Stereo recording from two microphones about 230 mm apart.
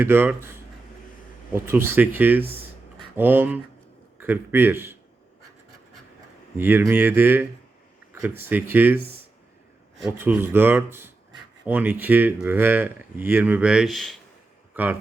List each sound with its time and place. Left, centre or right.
0.0 s speech: centre
2.4 s speech: right
3.2 s speech: centre
6.6 s speech: centre
10.0 s speech: centre
14.7 s a sound: centre